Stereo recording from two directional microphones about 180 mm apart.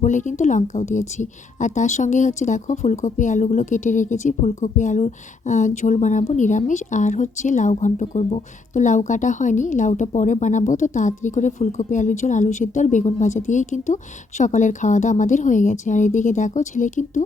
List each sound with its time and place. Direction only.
0.0 s a woman's voice: 45° left (ahead or behind)